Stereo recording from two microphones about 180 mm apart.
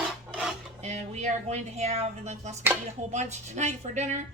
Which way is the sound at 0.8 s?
40° right (ahead or behind).